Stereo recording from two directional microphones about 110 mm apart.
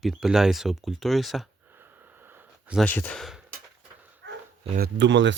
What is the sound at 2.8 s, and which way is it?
Speech, 15° left (ahead or behind).